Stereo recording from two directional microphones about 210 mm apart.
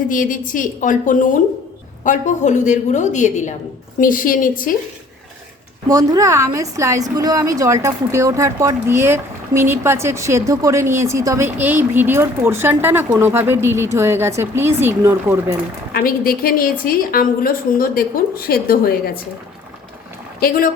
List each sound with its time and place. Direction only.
0.1 s a woman's voice: 40° left (ahead or behind)
5.9 s a woman's voice: 20° right (ahead or behind)
15.9 s a woman's voice: 45° left (ahead or behind)
20.4 s a woman's voice: 40° left (ahead or behind)